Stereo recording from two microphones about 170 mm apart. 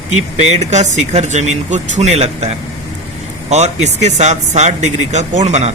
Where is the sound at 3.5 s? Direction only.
40° right (ahead or behind).